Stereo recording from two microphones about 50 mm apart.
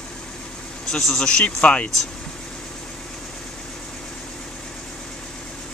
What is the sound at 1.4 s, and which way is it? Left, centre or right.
Speech, left.